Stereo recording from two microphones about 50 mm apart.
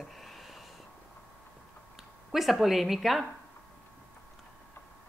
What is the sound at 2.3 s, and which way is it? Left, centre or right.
Speech, centre.